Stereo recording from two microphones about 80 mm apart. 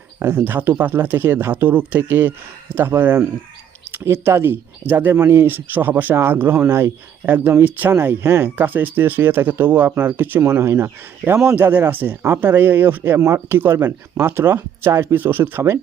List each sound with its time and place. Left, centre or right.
0.2 s speech: right